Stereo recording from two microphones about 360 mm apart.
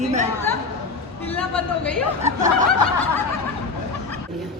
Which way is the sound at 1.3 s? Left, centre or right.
Centre.